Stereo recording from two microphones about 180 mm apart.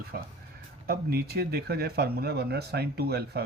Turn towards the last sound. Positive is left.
turn(degrees=-65)  # may be behind; listen again after turning